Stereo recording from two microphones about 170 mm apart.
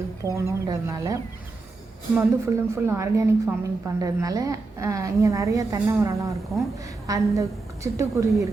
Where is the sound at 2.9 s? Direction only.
15° right (ahead or behind).